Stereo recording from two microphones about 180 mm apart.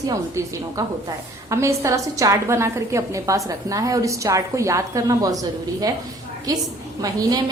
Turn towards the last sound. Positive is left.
turn(degrees=-20)  # may be behind; listen again after turning